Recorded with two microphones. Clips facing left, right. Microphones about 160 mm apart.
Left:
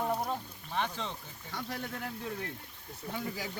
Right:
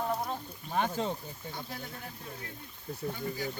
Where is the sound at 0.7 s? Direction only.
45° right (ahead or behind).